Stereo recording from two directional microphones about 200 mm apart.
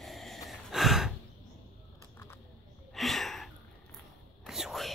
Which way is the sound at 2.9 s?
Centre (ahead or behind).